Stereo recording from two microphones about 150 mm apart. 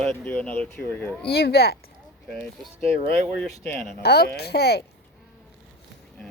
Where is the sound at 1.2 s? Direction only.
90° left.